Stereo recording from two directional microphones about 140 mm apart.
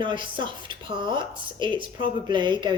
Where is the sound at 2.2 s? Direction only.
35° right (ahead or behind).